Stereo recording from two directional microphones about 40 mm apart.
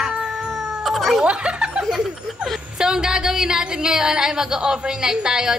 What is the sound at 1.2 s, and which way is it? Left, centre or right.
Speech, right.